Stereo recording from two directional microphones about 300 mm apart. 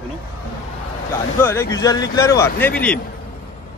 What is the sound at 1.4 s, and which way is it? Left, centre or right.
Speech, centre.